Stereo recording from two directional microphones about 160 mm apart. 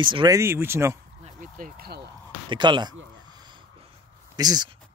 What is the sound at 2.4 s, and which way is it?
Speech, 30° right (ahead or behind).